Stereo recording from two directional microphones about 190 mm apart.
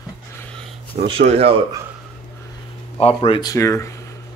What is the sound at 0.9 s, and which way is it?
Speech, 30° right (ahead or behind).